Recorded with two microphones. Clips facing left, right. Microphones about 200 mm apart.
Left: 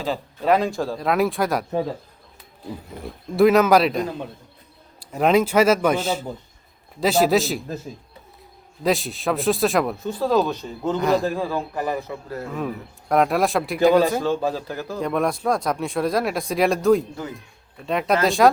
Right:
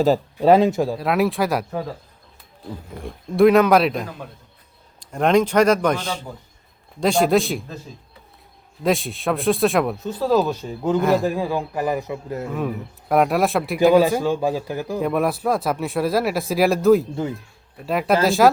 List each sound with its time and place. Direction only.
0.4 s speech: 25° right (ahead or behind)
0.9 s speech: centre (ahead or behind)
3.0 s speech: centre (ahead or behind)
8.8 s a man's voice: centre (ahead or behind); by 12.5 s 20° right (ahead or behind)
12.5 s a man's voice: centre (ahead or behind)
15.1 s speech: 5° right (ahead or behind)